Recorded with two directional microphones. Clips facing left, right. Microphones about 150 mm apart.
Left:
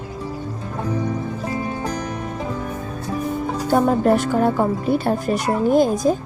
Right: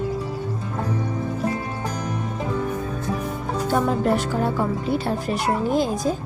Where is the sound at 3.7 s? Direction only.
45° left (ahead or behind).